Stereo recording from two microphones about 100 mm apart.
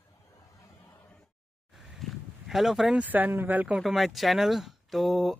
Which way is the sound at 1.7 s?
5° right (ahead or behind).